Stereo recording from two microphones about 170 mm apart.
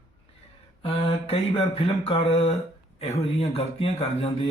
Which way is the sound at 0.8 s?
35° left (ahead or behind).